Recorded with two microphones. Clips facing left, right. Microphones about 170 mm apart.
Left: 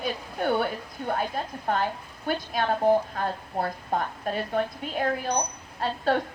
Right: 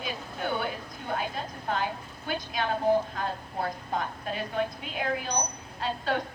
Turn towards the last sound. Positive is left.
turn(degrees=45)  # may be behind; listen again after turning